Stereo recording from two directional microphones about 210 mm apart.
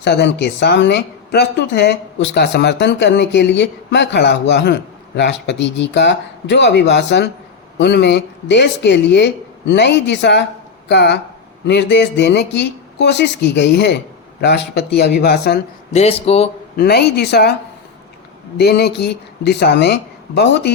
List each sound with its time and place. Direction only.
0.0 s a woman's voice: 50° left (ahead or behind)
15.9 s speech: 30° left (ahead or behind)
16.7 s speech: 50° left (ahead or behind)
18.5 s speech: 50° left (ahead or behind)